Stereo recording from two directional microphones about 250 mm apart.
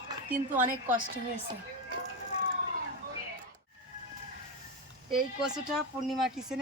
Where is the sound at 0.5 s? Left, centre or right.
Right.